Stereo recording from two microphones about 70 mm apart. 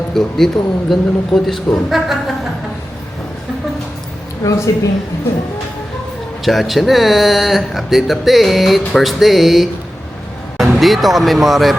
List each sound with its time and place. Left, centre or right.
0.1 s speech: centre
1.9 s a sound: centre
4.4 s speech: left
6.4 s speech: centre
10.8 s speech: centre